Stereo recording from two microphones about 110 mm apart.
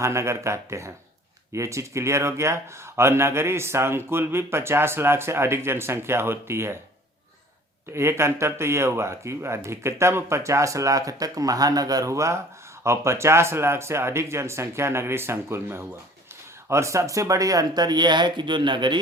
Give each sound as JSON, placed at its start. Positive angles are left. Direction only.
{"t": 0.0, "sound": "speech", "side_deg": -25}
{"t": 7.9, "sound": "speech", "side_deg": -25}